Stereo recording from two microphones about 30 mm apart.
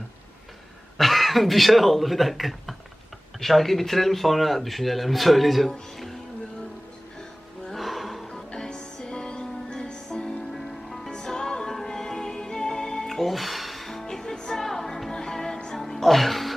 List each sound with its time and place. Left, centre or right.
0.9 s speech: centre
7.8 s music: centre
8.5 s music: centre
9.0 s music: left
10.2 s music: centre
11.1 s music: left
13.1 s music: centre
13.9 s music: centre
14.5 s music: centre